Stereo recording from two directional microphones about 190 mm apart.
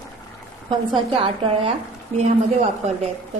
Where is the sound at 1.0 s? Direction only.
30° right (ahead or behind).